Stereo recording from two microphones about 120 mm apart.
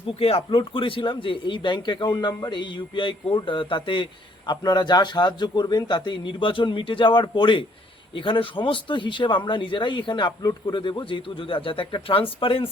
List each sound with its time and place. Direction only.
0.1 s a man's voice: 55° left (ahead or behind)